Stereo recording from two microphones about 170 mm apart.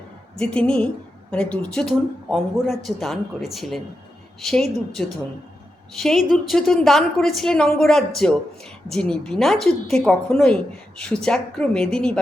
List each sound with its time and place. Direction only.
0.3 s a woman's voice: 5° left (ahead or behind)